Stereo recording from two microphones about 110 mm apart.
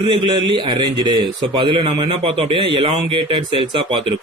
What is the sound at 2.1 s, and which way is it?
A man's voice, 60° right (ahead or behind).